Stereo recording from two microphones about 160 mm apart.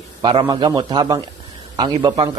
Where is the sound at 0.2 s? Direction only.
30° right (ahead or behind).